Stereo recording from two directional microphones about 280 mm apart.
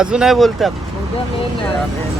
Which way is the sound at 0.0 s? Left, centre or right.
Centre.